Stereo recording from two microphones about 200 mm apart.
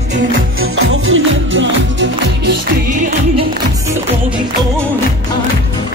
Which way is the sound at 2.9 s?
40° right (ahead or behind).